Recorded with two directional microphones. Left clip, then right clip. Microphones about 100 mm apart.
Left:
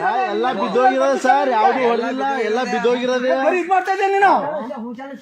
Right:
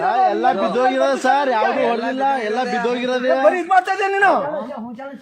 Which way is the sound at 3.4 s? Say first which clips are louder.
Right 2 dB; 30° right (ahead or behind).